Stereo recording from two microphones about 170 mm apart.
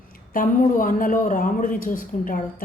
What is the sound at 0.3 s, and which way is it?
A man's voice, 55° left (ahead or behind).